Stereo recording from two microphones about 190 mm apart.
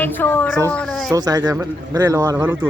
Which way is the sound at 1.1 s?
20° right (ahead or behind).